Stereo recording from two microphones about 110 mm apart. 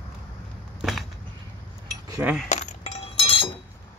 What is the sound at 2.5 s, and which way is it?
Chink, 90° left.